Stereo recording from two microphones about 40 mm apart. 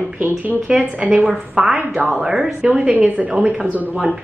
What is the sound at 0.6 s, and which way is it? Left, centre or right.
Speech, right.